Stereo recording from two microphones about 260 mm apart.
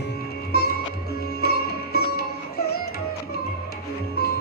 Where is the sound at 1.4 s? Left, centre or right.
Left.